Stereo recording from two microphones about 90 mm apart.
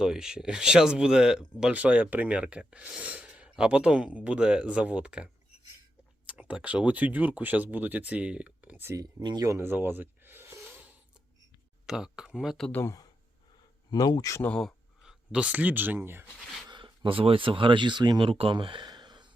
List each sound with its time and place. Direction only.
0.0 s speech: 5° right (ahead or behind)
9.2 s speech: 55° right (ahead or behind)
9.5 s a sound: 25° right (ahead or behind)
11.9 s speech: 5° right (ahead or behind)
12.8 s speech: 40° left (ahead or behind)
15.3 s speech: 15° right (ahead or behind)
16.6 s speech: 60° right (ahead or behind)
18.3 s speech: 90° right
18.5 s speech: 65° right (ahead or behind)
18.9 s a sound: 55° right (ahead or behind)